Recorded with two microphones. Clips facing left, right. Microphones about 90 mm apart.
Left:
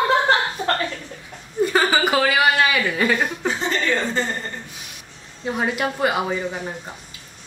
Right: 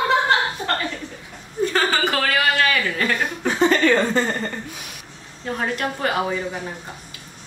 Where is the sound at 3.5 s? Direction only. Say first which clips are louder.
Right 9 dB; 60° right (ahead or behind).